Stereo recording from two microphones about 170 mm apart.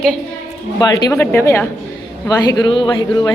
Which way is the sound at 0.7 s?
20° left (ahead or behind).